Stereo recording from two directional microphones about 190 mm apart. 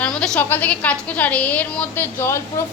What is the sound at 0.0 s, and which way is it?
A woman's voice, 5° left (ahead or behind).